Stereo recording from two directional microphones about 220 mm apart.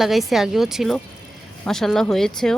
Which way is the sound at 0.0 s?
Centre (ahead or behind).